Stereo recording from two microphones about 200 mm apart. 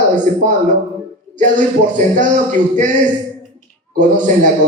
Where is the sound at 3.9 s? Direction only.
40° right (ahead or behind).